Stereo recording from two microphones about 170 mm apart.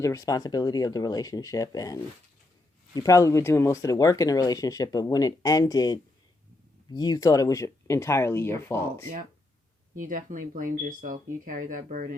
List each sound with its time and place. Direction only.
0.0 s speech: 20° left (ahead or behind)
9.9 s speech: 55° right (ahead or behind)